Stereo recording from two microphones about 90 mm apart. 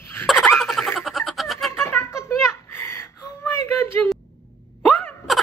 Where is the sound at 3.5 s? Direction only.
30° left (ahead or behind).